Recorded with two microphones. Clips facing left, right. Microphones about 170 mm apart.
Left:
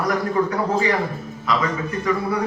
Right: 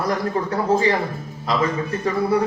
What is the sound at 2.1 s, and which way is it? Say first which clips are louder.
Speech: left 1 dB; 30° right (ahead or behind).